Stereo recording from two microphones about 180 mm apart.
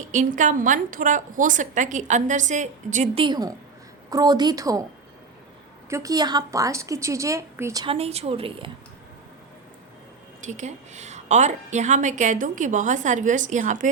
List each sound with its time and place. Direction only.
0.1 s a woman's voice: 45° right (ahead or behind)
3.2 s a woman's voice: 20° right (ahead or behind)
5.9 s a woman's voice: 20° right (ahead or behind)
7.9 s a woman's voice: 35° right (ahead or behind)
10.4 s a woman's voice: 40° right (ahead or behind)